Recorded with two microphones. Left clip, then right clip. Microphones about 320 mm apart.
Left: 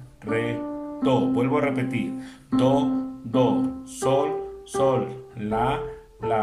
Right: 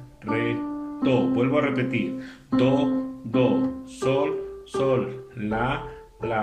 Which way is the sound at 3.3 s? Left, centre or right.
Centre.